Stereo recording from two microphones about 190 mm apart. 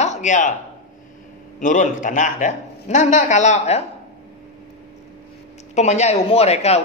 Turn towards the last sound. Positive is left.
turn(degrees=35)  # may be behind; listen again after turning